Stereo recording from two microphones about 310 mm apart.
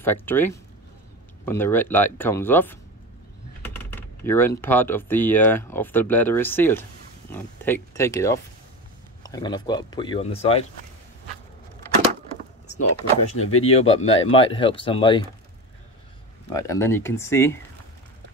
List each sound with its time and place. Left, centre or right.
0.0 s speech: centre
12.7 s speech: left
13.8 s speech: centre
16.5 s speech: centre